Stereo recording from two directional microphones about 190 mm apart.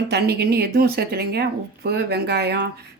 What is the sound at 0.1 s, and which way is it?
Speech, 60° right (ahead or behind).